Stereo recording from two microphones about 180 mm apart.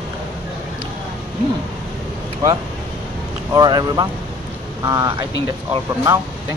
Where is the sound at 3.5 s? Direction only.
25° right (ahead or behind).